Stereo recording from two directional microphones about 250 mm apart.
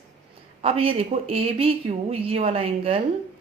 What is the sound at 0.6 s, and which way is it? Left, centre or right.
A woman's voice, right.